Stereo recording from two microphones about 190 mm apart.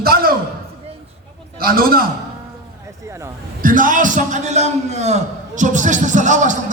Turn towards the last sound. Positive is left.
turn(degrees=-40)  # may be behind; listen again after turning